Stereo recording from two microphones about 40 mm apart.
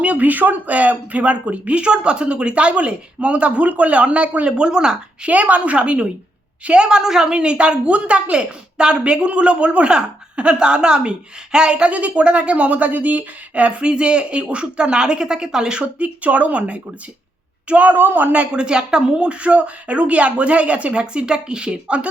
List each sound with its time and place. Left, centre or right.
0.0 s speech: right
5.3 s speech: right
6.7 s a woman's voice: centre
15.8 s speech: right
17.9 s a man's voice: right
18.5 s a woman's voice: right
21.0 s a woman's voice: right